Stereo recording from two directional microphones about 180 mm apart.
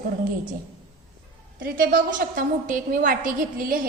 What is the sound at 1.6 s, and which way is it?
A woman's voice, 50° right (ahead or behind).